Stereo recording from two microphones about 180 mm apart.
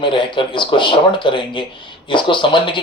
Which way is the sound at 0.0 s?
25° left (ahead or behind).